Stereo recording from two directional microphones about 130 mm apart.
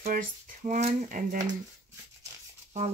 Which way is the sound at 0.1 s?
90° right.